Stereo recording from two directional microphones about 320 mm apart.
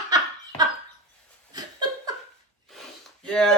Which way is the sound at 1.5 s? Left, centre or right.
Centre.